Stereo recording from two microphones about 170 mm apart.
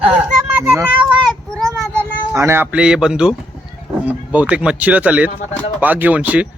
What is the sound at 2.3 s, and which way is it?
Speech, 15° right (ahead or behind).